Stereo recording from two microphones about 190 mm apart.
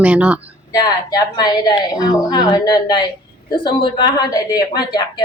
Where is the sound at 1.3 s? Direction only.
20° left (ahead or behind).